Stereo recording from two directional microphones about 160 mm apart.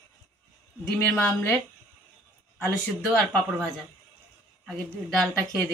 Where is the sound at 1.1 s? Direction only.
10° left (ahead or behind).